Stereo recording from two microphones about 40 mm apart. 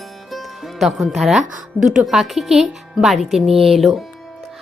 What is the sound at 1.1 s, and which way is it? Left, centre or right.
Speech, centre.